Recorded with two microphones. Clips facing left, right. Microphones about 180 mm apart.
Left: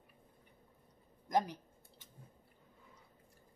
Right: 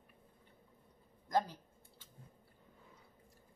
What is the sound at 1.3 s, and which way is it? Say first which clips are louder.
Speech: left 1 dB; 20° left (ahead or behind).